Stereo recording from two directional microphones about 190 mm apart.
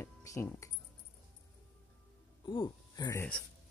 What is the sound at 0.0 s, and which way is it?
Music, 15° left (ahead or behind).